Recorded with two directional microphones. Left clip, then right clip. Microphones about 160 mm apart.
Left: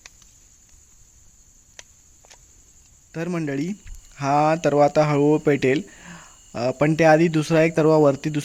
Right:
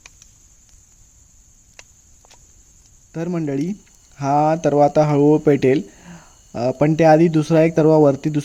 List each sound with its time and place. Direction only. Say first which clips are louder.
3.1 s speech: right 3 dB; 5° right (ahead or behind)